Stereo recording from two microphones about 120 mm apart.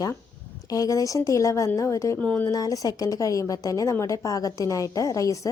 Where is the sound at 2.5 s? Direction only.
30° left (ahead or behind).